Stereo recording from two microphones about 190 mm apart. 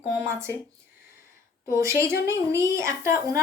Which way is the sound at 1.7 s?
15° right (ahead or behind).